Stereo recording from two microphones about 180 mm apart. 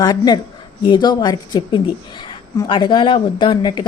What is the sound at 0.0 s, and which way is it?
Speech, 20° left (ahead or behind).